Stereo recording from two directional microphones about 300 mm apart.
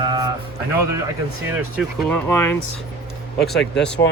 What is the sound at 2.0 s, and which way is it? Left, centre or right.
Speech, centre.